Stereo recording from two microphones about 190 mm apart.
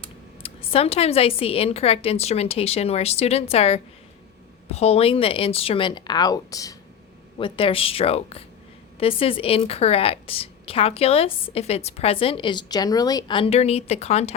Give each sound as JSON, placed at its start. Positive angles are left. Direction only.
{"t": 0.4, "sound": "a woman's voice", "side_deg": 30}